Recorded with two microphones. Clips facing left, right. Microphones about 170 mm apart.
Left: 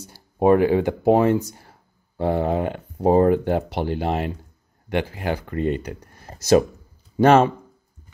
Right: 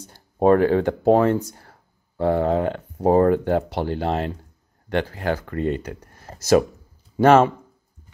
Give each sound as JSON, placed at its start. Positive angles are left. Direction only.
{"t": 0.0, "sound": "speech", "side_deg": 10}